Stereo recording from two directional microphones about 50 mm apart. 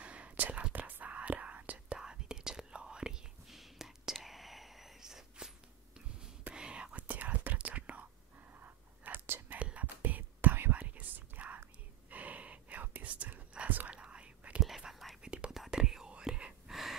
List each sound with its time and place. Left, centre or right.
0.0 s whispering: right
2.0 s whispering: centre
3.4 s whispering: centre
6.5 s whispering: centre
8.5 s a sound: right
9.6 s whispering: right
10.0 s whispering: right
12.1 s gasp: right
13.0 s whispering: right
14.6 s whispering: centre
15.2 s whispering: right
16.6 s gasp: centre